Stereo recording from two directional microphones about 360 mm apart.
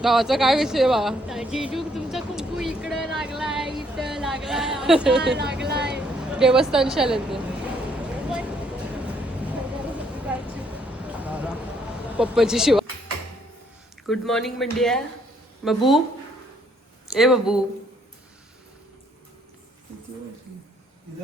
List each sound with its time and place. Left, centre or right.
0.0 s speech: centre
5.2 s a woman's voice: right
5.6 s vehicle: right
6.4 s a woman's voice: centre
10.3 s a sound: centre
12.1 s a woman's voice: centre
14.1 s a woman's voice: centre
17.1 s a woman's voice: centre